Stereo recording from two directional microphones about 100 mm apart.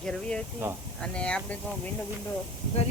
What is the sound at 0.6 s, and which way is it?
Speech, 20° right (ahead or behind).